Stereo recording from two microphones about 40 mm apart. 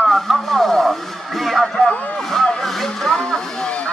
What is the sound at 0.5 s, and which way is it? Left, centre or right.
Radio, centre.